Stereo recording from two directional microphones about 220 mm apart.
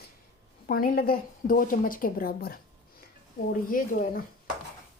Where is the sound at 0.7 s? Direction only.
40° left (ahead or behind).